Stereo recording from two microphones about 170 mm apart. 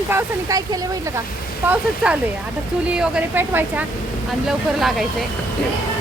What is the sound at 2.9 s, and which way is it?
Speech, 5° right (ahead or behind).